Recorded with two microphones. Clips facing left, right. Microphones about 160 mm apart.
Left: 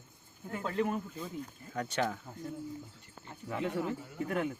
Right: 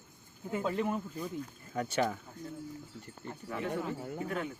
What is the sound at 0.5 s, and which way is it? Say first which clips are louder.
Speech: right 1 dB; 15° right (ahead or behind).